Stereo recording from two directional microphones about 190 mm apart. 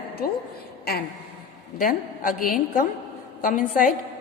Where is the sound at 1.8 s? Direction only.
45° left (ahead or behind).